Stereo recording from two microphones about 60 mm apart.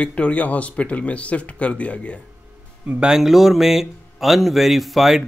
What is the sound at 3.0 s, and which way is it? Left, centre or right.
Speech, centre.